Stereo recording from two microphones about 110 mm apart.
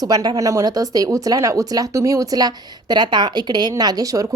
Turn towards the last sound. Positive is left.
turn(degrees=-30)  # may be behind; listen again after turning